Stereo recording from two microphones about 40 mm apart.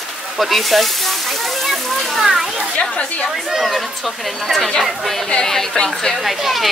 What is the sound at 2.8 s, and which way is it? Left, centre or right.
Speech, left.